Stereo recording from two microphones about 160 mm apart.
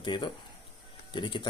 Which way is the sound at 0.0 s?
30° left (ahead or behind).